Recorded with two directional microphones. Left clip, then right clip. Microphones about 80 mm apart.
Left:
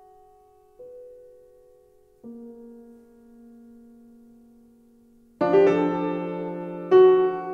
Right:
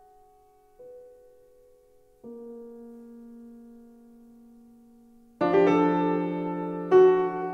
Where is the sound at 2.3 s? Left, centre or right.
Right.